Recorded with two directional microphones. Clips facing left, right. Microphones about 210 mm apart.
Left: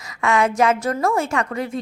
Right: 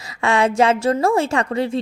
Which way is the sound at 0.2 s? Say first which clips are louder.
Right 2 dB; 30° right (ahead or behind).